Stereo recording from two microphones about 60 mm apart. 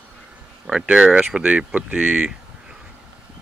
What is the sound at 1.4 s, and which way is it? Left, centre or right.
Speech, right.